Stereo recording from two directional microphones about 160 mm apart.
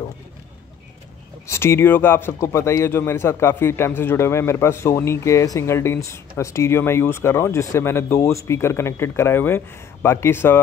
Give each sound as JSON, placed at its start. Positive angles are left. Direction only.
{"t": 1.5, "sound": "speech", "side_deg": 15}